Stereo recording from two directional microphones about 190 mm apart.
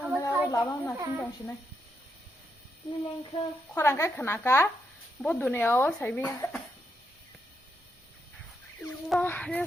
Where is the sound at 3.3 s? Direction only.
30° left (ahead or behind).